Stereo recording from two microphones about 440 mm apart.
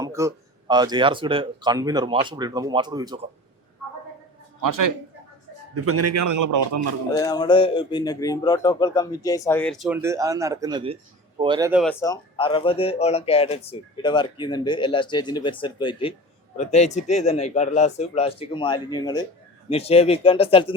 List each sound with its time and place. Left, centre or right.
0.0 s speech: centre
4.6 s a man's voice: right
5.7 s a man's voice: right
7.2 s speech: centre